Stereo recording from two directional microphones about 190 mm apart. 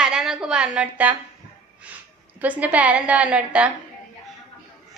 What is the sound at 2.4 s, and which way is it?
A woman's voice, 10° right (ahead or behind).